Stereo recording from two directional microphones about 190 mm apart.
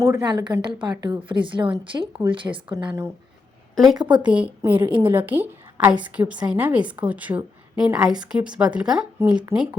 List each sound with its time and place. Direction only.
0.0 s a woman's voice: 20° right (ahead or behind)